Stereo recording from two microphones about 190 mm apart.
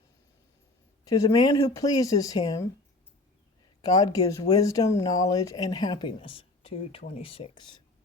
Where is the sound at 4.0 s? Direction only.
20° left (ahead or behind).